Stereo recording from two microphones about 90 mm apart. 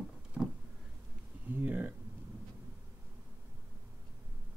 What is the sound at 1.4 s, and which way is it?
Speech, 20° right (ahead or behind).